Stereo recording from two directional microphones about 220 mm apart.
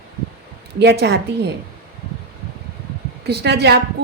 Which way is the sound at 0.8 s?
50° right (ahead or behind).